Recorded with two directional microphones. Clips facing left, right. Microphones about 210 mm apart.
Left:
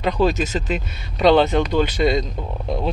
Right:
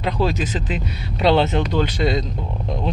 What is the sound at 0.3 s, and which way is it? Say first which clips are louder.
Speech: left 2 dB; 45° left (ahead or behind).